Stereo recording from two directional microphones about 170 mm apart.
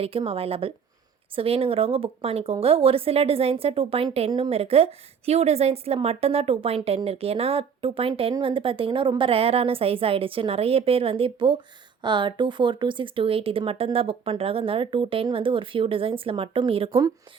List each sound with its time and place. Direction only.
0.0 s a woman's voice: 35° right (ahead or behind)